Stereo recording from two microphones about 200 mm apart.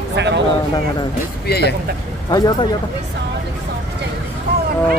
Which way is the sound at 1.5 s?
55° left (ahead or behind).